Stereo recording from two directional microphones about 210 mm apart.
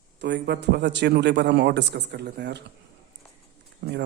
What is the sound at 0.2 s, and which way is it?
A man's voice, 55° right (ahead or behind).